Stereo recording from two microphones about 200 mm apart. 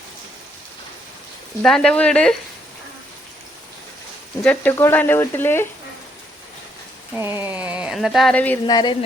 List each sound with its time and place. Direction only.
1.6 s speech: 5° left (ahead or behind)
4.4 s speech: 10° left (ahead or behind)
7.1 s speech: 10° right (ahead or behind); by 8.5 s 5° left (ahead or behind)
8.6 s speech: 20° left (ahead or behind)